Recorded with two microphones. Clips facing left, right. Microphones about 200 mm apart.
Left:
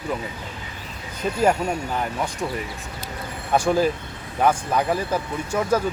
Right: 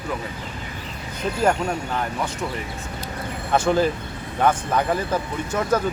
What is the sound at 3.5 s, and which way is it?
Speech, 10° left (ahead or behind).